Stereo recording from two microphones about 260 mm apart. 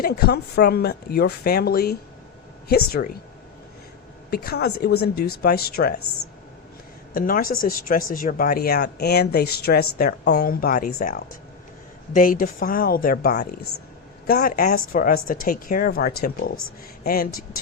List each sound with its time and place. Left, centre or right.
0.0 s speech: left
4.3 s speech: left
7.1 s speech: left